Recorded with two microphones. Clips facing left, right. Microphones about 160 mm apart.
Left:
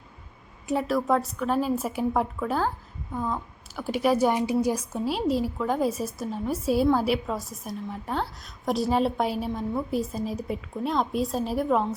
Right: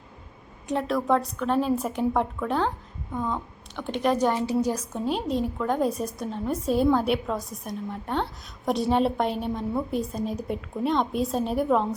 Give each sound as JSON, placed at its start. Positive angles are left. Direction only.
{"t": 0.7, "sound": "a woman's voice", "side_deg": 5}